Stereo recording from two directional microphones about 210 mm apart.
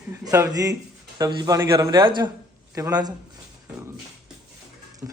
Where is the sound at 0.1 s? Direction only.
15° right (ahead or behind).